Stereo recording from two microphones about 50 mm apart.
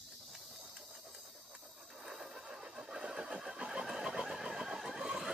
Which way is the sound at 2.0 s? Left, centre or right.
Centre.